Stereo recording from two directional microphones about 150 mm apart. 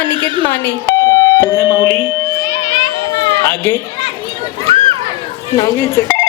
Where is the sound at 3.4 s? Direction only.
15° left (ahead or behind).